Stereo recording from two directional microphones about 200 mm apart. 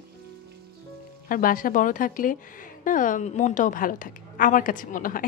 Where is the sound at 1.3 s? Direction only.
45° left (ahead or behind).